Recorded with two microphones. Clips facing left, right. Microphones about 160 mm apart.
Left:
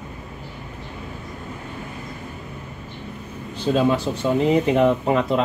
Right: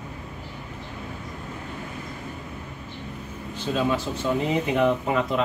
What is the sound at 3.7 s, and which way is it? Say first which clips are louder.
Speech: left 5 dB; 35° left (ahead or behind).